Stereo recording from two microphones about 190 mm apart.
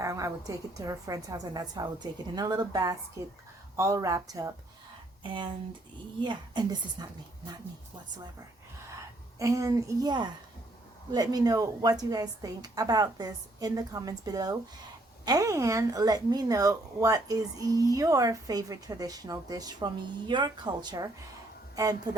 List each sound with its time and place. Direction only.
0.0 s a woman's voice: 15° right (ahead or behind)
9.4 s a woman's voice: 15° right (ahead or behind)